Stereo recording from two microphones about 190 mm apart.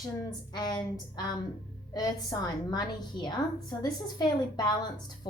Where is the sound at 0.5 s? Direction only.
20° left (ahead or behind).